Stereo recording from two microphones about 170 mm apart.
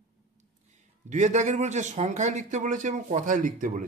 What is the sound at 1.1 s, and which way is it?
Speech, 45° right (ahead or behind).